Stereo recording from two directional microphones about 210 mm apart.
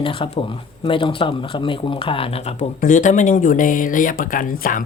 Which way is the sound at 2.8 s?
40° left (ahead or behind).